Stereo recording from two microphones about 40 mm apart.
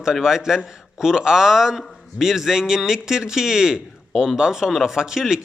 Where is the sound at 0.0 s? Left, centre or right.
Centre.